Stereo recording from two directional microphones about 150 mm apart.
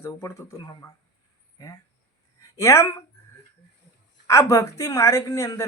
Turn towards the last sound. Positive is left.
turn(degrees=20)  # may be behind; listen again after turning